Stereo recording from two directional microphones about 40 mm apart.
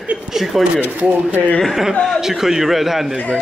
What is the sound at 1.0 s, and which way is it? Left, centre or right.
Speech, right.